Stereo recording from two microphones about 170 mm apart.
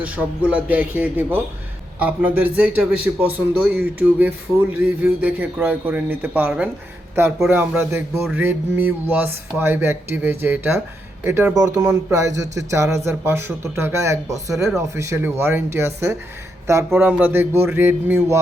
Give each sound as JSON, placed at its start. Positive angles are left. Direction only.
{"t": 0.0, "sound": "a man's voice", "side_deg": -10}